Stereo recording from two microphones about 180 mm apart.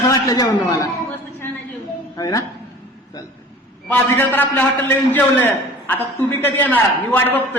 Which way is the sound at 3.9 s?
10° left (ahead or behind).